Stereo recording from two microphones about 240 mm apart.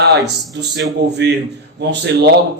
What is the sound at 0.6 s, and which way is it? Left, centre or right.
A man's voice, right.